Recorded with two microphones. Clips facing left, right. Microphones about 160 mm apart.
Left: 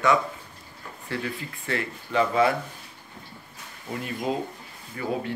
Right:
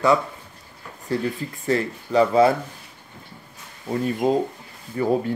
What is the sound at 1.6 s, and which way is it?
Speech, 35° right (ahead or behind).